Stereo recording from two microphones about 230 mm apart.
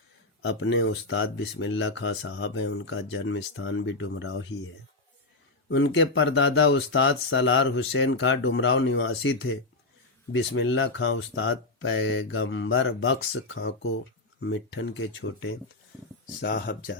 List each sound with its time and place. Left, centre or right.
0.4 s speech: left
5.6 s speech: left